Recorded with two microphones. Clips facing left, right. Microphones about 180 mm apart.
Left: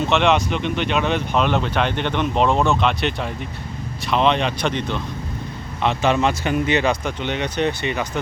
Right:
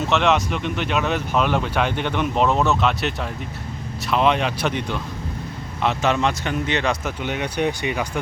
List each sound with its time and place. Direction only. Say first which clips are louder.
0.1 s speech: even; centre (ahead or behind)
7.0 s speech: left 2 dB; 5° right (ahead or behind)